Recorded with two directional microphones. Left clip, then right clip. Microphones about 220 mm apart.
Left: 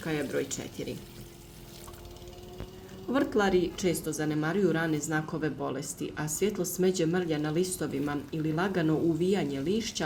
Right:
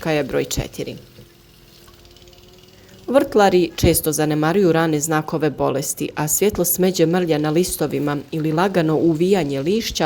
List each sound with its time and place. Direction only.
0.0 s speech: 45° right (ahead or behind)
3.1 s speech: 40° right (ahead or behind)